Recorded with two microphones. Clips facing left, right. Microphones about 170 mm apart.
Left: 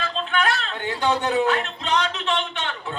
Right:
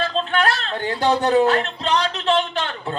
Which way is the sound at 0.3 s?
35° right (ahead or behind).